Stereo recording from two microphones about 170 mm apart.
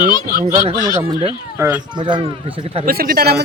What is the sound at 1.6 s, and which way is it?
Speech, 15° right (ahead or behind).